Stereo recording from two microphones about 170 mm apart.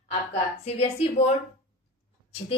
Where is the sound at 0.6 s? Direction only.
40° left (ahead or behind).